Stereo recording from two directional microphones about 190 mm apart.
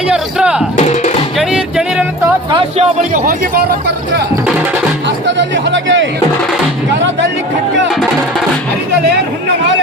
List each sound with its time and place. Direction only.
0.1 s speech: 5° right (ahead or behind)
1.4 s music: 5° right (ahead or behind)
2.7 s a man's voice: 45° right (ahead or behind)
5.0 s speech: 70° right (ahead or behind)